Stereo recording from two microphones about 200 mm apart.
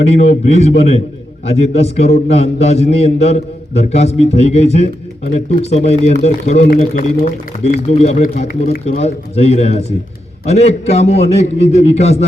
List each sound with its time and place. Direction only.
0.1 s a man's voice: 30° left (ahead or behind)